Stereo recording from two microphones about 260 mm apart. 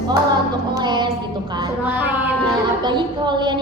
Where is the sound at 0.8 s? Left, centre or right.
Centre.